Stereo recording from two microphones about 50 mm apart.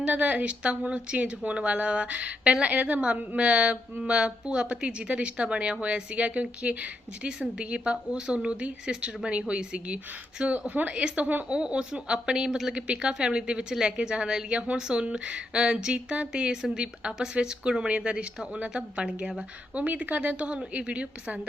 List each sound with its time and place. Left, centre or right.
0.1 s a woman's voice: right; by 12.7 s centre
12.7 s a woman's voice: right